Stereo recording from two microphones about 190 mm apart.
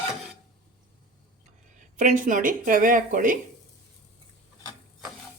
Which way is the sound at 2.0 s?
45° right (ahead or behind).